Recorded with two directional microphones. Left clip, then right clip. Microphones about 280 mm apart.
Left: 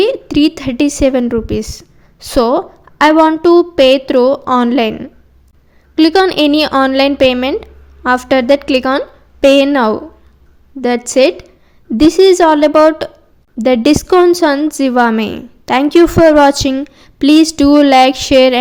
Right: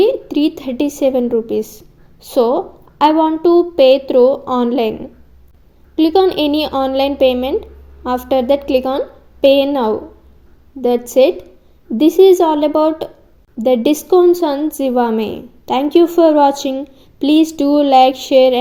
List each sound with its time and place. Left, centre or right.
0.0 s a woman's voice: left
13.6 s a woman's voice: left